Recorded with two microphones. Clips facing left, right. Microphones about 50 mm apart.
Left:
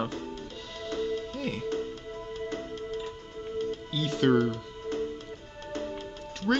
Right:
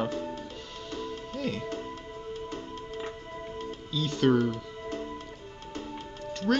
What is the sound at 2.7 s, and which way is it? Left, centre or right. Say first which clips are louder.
Music: left 2 dB; right.